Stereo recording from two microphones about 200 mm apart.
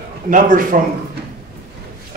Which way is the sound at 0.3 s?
40° right (ahead or behind).